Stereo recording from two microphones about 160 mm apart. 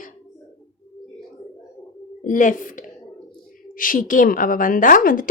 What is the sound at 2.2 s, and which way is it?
A woman's voice, 55° left (ahead or behind).